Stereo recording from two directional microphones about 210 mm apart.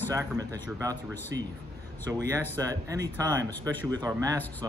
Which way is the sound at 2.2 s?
15° right (ahead or behind).